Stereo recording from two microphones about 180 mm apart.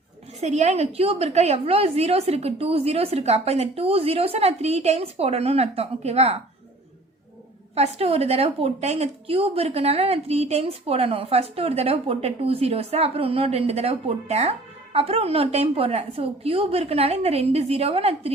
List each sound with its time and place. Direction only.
0.4 s a woman's voice: 40° right (ahead or behind)
7.8 s a woman's voice: 35° right (ahead or behind)